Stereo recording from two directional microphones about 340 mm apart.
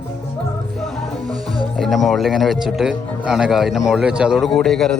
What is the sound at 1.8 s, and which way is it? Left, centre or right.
Speech, centre.